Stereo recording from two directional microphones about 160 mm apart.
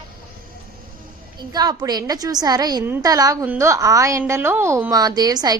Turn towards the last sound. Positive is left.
turn(degrees=-25)  # may be behind; listen again after turning